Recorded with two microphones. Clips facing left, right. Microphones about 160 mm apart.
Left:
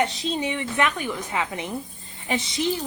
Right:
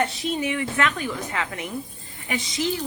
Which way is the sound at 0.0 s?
20° left (ahead or behind).